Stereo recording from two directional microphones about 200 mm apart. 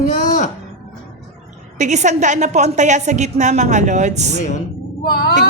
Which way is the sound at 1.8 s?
35° right (ahead or behind).